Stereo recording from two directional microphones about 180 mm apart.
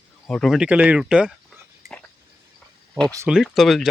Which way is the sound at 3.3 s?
Centre (ahead or behind).